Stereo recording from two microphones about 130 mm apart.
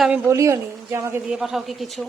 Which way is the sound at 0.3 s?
20° right (ahead or behind).